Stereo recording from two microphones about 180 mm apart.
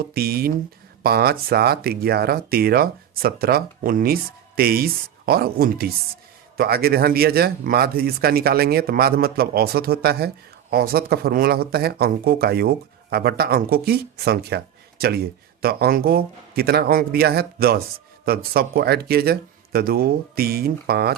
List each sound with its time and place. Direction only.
0.0 s speech: 55° right (ahead or behind)